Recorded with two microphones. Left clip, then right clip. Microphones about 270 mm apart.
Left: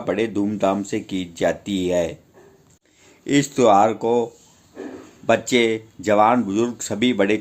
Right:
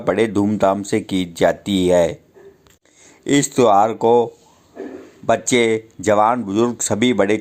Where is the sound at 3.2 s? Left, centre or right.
Centre.